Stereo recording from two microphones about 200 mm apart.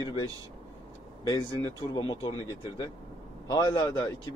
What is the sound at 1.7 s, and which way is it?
A man's voice, 20° left (ahead or behind).